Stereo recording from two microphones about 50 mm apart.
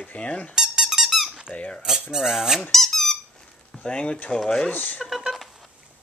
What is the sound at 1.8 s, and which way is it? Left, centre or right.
Speech, centre.